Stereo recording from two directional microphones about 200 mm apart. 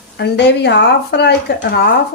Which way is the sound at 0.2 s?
55° left (ahead or behind).